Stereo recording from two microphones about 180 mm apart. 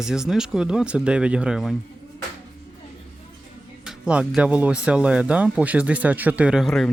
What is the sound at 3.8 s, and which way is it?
Speech, 5° right (ahead or behind).